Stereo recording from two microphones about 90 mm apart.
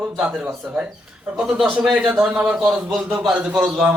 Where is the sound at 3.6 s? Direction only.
15° right (ahead or behind).